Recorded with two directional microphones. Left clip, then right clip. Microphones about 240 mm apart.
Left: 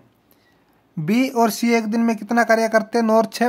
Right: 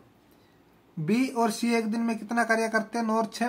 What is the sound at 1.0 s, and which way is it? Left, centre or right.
Speech, left.